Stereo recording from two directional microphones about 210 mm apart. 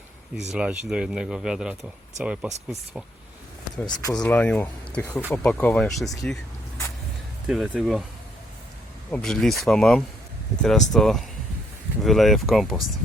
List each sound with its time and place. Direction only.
0.5 s speech: 5° right (ahead or behind)
3.8 s speech: 20° left (ahead or behind); by 6.1 s centre (ahead or behind)
7.4 s speech: 5° right (ahead or behind)
9.1 s speech: 5° left (ahead or behind)